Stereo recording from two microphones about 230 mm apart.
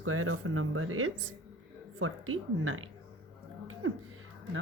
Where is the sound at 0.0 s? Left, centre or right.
Right.